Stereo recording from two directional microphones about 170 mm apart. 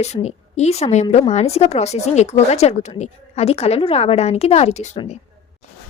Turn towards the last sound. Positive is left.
turn(degrees=35)  # may be behind; listen again after turning